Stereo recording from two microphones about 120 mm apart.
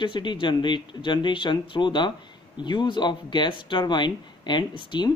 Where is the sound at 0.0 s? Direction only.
40° left (ahead or behind).